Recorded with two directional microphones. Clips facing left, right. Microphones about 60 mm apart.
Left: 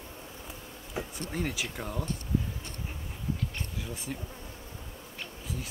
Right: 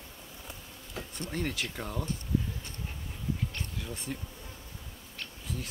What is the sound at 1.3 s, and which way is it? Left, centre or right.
Speech, centre.